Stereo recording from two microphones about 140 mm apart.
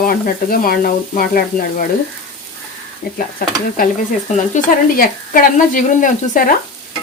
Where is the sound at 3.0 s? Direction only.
85° left.